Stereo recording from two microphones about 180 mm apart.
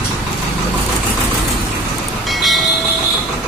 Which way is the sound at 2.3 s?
Centre (ahead or behind).